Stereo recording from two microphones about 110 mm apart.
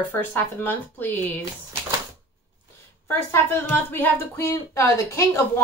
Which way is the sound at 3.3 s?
20° left (ahead or behind).